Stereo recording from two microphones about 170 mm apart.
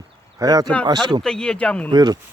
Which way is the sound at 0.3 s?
20° right (ahead or behind).